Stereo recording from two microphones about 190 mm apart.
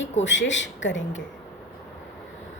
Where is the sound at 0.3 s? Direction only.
75° left (ahead or behind).